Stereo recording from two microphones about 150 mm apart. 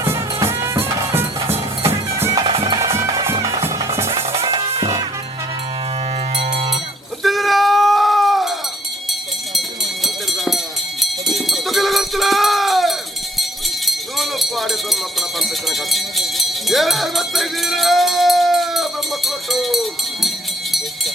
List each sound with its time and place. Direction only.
0.0 s music: 15° right (ahead or behind)
2.4 s music: 35° right (ahead or behind)
2.7 s music: 20° right (ahead or behind)
7.2 s sheep: centre (ahead or behind)
9.6 s a sound: centre (ahead or behind)
11.0 s sheep: centre (ahead or behind)
13.4 s a sound: centre (ahead or behind)
15.4 s sheep: centre (ahead or behind)